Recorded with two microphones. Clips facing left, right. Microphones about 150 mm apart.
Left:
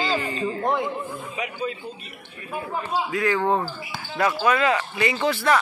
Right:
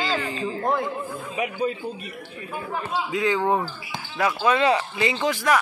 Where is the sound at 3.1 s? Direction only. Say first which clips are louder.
Right 1 dB; 15° right (ahead or behind).